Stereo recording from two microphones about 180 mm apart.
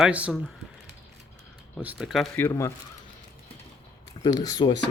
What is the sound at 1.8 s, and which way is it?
Speech, centre (ahead or behind).